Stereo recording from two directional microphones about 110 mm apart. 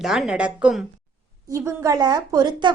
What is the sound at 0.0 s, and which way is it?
Speech, 5° right (ahead or behind).